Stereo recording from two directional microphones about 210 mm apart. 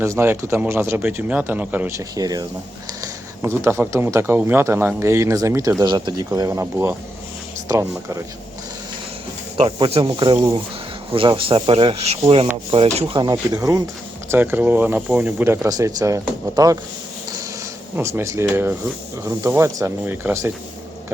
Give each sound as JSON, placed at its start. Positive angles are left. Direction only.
{"t": 0.0, "sound": "speech", "side_deg": -10}
{"t": 9.6, "sound": "speech", "side_deg": -25}
{"t": 17.9, "sound": "speech", "side_deg": -10}